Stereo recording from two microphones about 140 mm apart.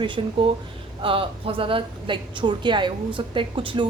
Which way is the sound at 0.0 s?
35° right (ahead or behind).